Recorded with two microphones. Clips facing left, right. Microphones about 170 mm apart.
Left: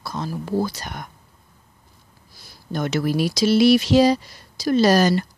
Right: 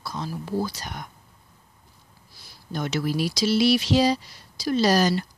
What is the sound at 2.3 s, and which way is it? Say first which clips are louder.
Speech: left 4 dB; 45° left (ahead or behind).